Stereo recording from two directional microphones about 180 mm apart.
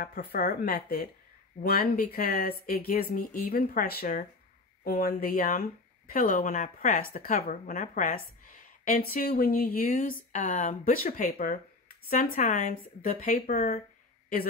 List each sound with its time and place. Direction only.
0.0 s speech: 60° left (ahead or behind)